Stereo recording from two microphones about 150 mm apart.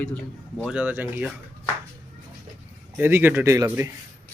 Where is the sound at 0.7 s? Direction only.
10° right (ahead or behind).